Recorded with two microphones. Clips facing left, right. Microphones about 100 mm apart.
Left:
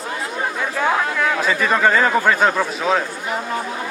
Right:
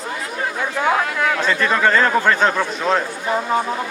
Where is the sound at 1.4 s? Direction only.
5° left (ahead or behind).